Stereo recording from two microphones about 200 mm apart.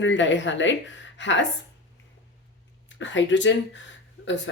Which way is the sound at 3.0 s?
65° left (ahead or behind).